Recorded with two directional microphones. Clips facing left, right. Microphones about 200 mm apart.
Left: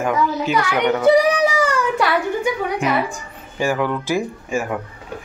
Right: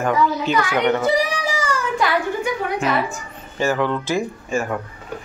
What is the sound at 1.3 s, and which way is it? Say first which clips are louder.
Child singing: left 7 dB; 60° left (ahead or behind).